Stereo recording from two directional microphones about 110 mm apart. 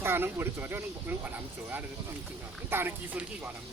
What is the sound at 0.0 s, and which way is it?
Speech, 20° right (ahead or behind).